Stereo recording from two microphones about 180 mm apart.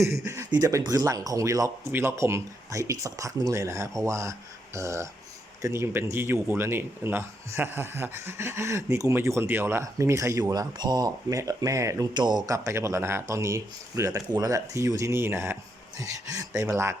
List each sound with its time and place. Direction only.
0.0 s speech: 15° right (ahead or behind)